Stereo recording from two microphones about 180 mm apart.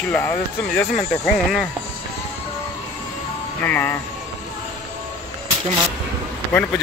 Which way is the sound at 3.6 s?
10° left (ahead or behind).